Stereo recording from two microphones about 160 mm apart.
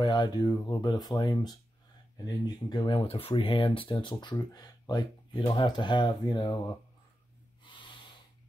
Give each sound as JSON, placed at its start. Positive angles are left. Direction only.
{"t": 0.0, "sound": "speech", "side_deg": 25}
{"t": 7.6, "sound": "snort", "side_deg": 30}